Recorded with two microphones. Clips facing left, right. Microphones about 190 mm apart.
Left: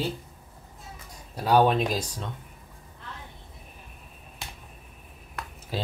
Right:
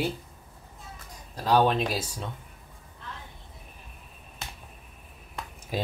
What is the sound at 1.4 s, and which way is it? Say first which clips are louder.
Speech: left 2 dB; 10° left (ahead or behind).